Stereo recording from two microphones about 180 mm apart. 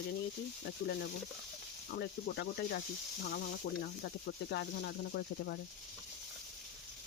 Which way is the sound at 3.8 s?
65° left (ahead or behind).